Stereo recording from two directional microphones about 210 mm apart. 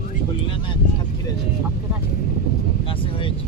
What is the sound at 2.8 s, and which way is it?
Vehicle, 25° left (ahead or behind).